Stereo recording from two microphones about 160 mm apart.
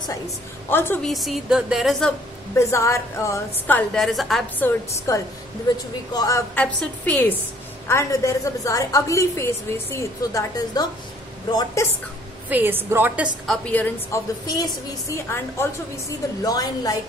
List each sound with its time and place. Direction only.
0.7 s a woman's voice: 15° left (ahead or behind)
1.0 s a woman's voice: centre (ahead or behind)
2.7 s a woman's voice: 20° left (ahead or behind); by 4.5 s centre (ahead or behind)
4.6 s a woman's voice: 15° left (ahead or behind)
6.5 s a woman's voice: 10° left (ahead or behind)
12.4 s a woman's voice: 10° right (ahead or behind)
13.5 s a woman's voice: 10° left (ahead or behind)
14.4 s a woman's voice: 20° left (ahead or behind)